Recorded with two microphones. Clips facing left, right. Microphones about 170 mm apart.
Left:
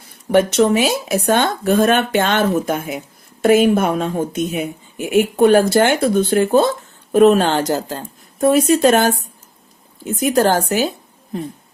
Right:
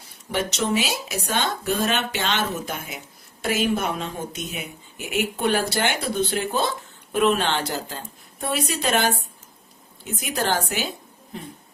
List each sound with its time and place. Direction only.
0.3 s speech: 55° left (ahead or behind)